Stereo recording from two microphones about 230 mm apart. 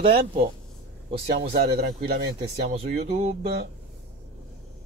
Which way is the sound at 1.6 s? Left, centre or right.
Right.